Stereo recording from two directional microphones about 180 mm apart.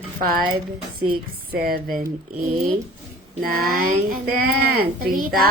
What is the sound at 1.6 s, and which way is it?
A woman's voice, 55° right (ahead or behind).